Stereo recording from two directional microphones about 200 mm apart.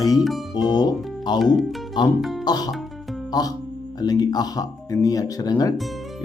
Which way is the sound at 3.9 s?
20° left (ahead or behind).